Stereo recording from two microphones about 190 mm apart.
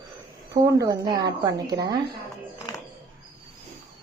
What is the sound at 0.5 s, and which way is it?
A woman's voice, 20° right (ahead or behind).